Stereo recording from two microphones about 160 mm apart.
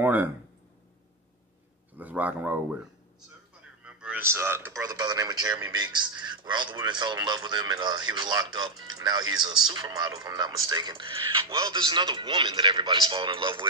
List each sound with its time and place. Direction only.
0.0 s speech: 10° right (ahead or behind)
2.0 s speech: 10° right (ahead or behind)
3.8 s speech: 10° right (ahead or behind); by 13.7 s 30° right (ahead or behind)